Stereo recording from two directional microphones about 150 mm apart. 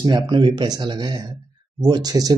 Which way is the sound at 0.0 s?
30° right (ahead or behind).